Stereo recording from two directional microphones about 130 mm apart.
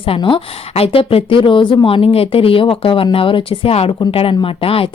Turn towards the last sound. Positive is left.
turn(degrees=45)  # may be behind; listen again after turning